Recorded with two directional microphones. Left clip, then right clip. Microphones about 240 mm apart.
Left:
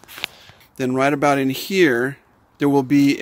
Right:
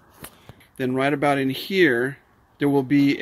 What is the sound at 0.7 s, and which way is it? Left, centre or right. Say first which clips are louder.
Speech: left 4 dB; centre.